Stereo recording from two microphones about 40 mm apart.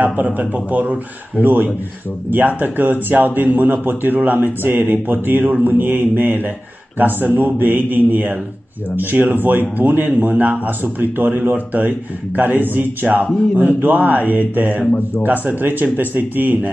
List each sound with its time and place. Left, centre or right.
0.0 s a man's voice: right